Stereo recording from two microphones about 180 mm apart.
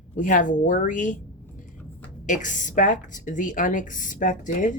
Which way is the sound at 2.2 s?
45° left (ahead or behind).